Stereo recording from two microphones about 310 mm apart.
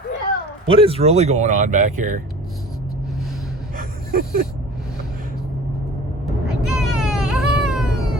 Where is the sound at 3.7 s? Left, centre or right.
Right.